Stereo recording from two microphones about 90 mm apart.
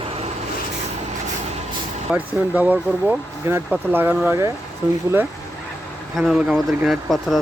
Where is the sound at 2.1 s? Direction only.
15° right (ahead or behind).